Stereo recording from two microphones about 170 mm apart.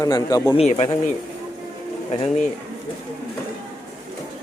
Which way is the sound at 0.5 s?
40° left (ahead or behind).